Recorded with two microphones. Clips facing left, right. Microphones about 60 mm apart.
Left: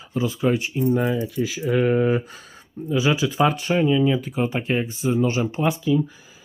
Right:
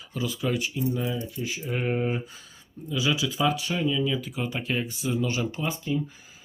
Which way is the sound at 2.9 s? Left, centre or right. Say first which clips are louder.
Left 6 dB; left.